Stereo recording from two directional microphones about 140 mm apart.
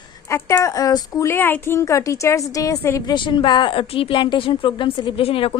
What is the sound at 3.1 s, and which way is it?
A woman's voice, 35° left (ahead or behind).